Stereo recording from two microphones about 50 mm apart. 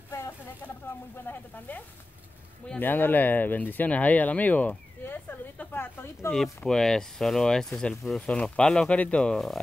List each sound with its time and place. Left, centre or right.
1.1 s speech: left
2.8 s speech: left
5.0 s a sound: left
5.6 s speech: left
6.6 s speech: centre